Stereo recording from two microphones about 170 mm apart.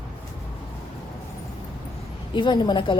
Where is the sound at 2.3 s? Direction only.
25° left (ahead or behind).